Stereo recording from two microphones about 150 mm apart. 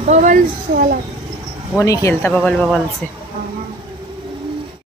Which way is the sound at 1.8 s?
20° left (ahead or behind).